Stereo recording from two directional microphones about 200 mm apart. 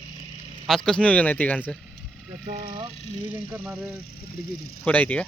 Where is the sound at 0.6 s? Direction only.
Centre (ahead or behind).